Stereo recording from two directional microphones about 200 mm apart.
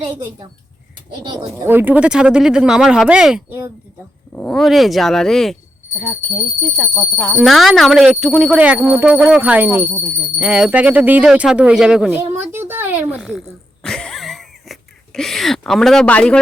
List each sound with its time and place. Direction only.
1.2 s speech: 20° right (ahead or behind)
1.6 s speech: 10° right (ahead or behind); by 7.3 s 10° left (ahead or behind)
7.3 s speech: centre (ahead or behind)
13.8 s a sound: 5° left (ahead or behind)